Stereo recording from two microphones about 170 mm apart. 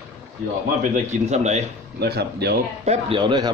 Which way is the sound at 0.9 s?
45° right (ahead or behind).